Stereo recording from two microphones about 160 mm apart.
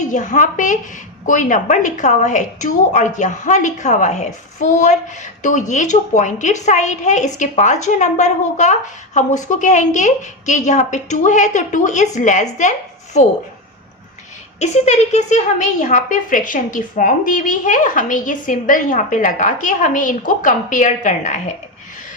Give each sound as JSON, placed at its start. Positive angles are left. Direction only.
{"t": 0.0, "sound": "a woman's voice", "side_deg": 50}
{"t": 14.6, "sound": "a woman's voice", "side_deg": 45}